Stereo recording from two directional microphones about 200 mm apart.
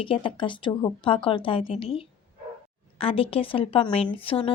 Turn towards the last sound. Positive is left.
turn(degrees=30)  # may be behind; listen again after turning